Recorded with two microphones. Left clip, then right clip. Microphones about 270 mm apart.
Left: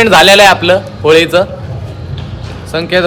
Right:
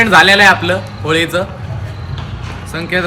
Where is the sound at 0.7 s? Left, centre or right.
Centre.